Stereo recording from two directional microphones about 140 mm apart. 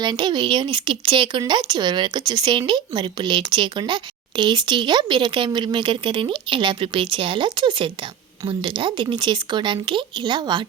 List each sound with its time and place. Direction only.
0.0 s speech: 30° right (ahead or behind)